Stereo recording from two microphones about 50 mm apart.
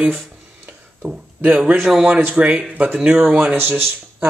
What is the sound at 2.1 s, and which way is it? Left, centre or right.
Speech, right.